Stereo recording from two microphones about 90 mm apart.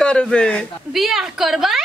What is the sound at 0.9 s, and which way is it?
Speech, 5° right (ahead or behind).